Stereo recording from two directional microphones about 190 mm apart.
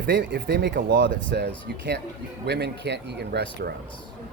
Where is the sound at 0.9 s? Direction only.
85° right; by 3.7 s 60° right (ahead or behind).